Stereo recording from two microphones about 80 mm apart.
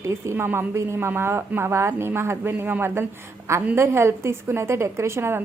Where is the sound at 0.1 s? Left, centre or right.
Right.